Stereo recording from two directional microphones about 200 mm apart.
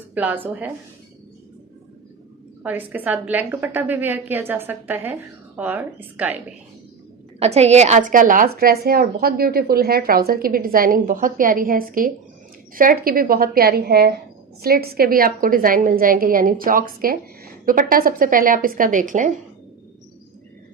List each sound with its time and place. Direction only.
0.1 s a woman's voice: 10° right (ahead or behind)
2.6 s a woman's voice: 10° right (ahead or behind)
7.3 s a woman's voice: 30° right (ahead or behind)